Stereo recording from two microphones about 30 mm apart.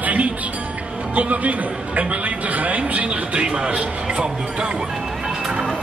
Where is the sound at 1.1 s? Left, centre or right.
Right.